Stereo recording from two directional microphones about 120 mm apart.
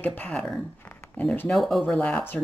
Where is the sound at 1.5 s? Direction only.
Centre (ahead or behind).